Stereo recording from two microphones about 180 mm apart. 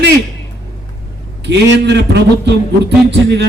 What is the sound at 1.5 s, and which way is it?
A man's voice, 70° right (ahead or behind).